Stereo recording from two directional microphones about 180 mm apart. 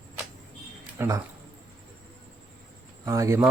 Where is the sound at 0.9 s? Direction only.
20° right (ahead or behind).